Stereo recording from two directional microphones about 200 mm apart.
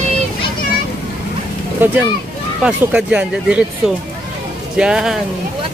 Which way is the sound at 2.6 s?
5° right (ahead or behind).